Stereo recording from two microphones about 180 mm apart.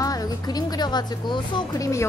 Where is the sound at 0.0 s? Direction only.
20° left (ahead or behind).